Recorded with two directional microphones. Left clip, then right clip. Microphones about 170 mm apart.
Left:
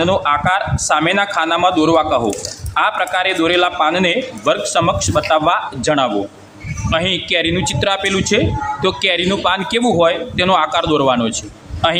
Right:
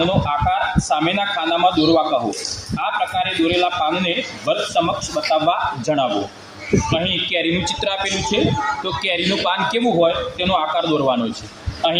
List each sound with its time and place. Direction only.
0.0 s a man's voice: 20° left (ahead or behind)